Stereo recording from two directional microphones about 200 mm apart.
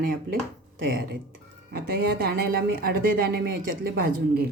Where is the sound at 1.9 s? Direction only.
50° right (ahead or behind).